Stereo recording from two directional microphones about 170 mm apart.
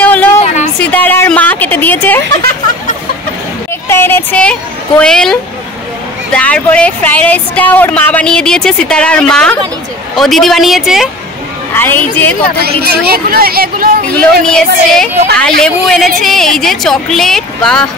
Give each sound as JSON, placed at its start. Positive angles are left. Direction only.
{"t": 0.0, "sound": "a sound", "side_deg": 10}
{"t": 3.9, "sound": "a woman's voice", "side_deg": 10}
{"t": 11.7, "sound": "speech", "side_deg": 10}
{"t": 12.6, "sound": "speech", "side_deg": -65}
{"t": 14.4, "sound": "a woman's voice", "side_deg": 5}